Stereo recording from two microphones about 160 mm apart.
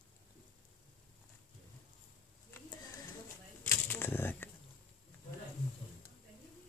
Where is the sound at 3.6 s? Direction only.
15° left (ahead or behind).